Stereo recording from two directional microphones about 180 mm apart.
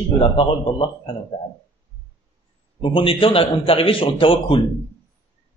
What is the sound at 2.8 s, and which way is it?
Speech, 30° left (ahead or behind).